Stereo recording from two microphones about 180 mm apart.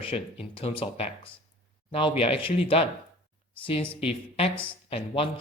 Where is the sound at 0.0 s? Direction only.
30° left (ahead or behind).